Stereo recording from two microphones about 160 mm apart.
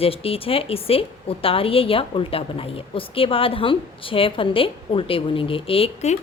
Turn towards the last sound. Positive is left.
turn(degrees=40)  # may be behind; listen again after turning